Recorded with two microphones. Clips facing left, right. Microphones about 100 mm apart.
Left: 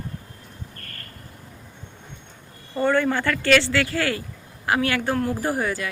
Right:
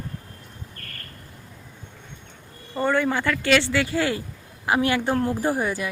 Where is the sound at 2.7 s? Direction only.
10° right (ahead or behind).